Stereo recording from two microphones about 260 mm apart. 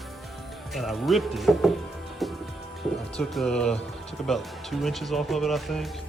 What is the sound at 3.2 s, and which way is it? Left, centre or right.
Speech, centre.